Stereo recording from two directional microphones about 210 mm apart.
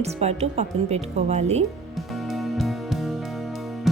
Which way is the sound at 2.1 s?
Centre (ahead or behind).